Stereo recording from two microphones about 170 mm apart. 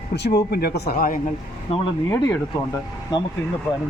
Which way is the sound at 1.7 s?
35° left (ahead or behind).